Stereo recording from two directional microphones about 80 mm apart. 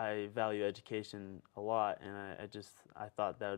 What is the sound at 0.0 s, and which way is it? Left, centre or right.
Speech, left.